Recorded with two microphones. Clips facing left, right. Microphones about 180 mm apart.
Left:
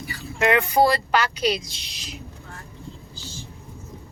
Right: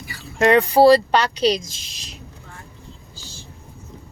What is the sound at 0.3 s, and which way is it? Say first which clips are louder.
Speech: right 5 dB; 35° right (ahead or behind).